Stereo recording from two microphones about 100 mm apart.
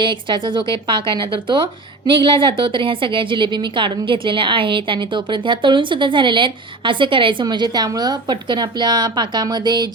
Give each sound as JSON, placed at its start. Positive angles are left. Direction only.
{"t": 0.0, "sound": "speech", "side_deg": -55}
{"t": 7.4, "sound": "a woman's voice", "side_deg": -45}